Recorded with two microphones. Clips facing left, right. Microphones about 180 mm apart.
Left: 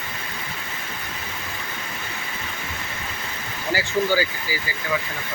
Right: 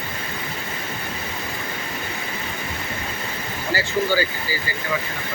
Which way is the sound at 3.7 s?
15° left (ahead or behind).